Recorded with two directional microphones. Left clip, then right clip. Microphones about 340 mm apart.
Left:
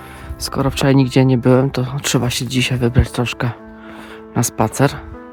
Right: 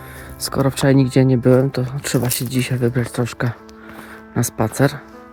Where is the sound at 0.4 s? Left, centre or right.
Centre.